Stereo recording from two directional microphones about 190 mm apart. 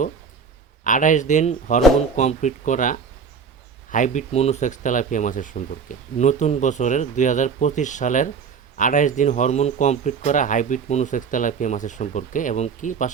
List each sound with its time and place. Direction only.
0.9 s speech: 45° left (ahead or behind)